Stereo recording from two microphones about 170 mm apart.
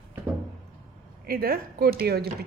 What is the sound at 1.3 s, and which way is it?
Speech, 60° right (ahead or behind).